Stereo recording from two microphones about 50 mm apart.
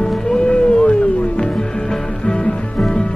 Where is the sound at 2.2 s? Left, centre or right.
Centre.